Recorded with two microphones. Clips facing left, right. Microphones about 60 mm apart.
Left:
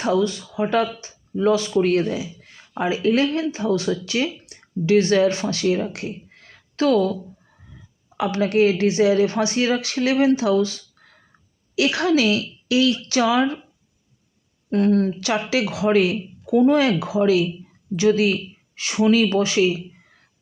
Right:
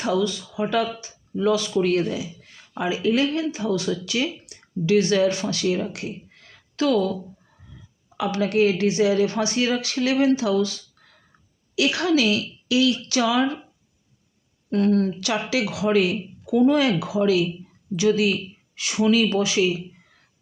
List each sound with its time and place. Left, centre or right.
0.0 s speech: left
8.1 s speech: left
14.7 s speech: left